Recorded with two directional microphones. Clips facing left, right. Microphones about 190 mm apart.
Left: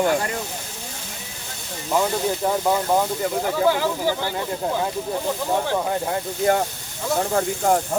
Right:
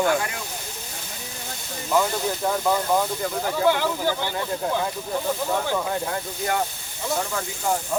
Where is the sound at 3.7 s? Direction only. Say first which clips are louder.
Right 1 dB; 5° left (ahead or behind).